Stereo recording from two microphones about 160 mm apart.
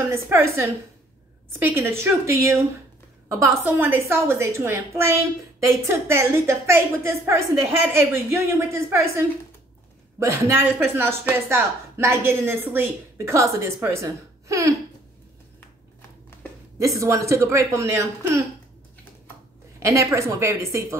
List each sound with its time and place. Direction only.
0.0 s a woman's voice: 15° right (ahead or behind)
16.7 s speech: 20° right (ahead or behind)
19.8 s a woman's voice: 20° right (ahead or behind)